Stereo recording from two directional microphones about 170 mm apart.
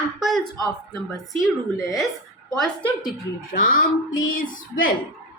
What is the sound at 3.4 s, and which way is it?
Female singing, 55° left (ahead or behind).